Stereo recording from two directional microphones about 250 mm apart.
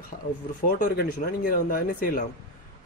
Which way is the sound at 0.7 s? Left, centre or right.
Left.